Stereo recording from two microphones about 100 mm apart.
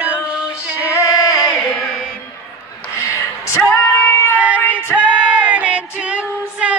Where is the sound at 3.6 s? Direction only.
15° left (ahead or behind).